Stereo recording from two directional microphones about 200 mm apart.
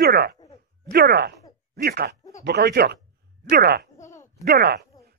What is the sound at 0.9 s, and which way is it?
Speech, 50° right (ahead or behind).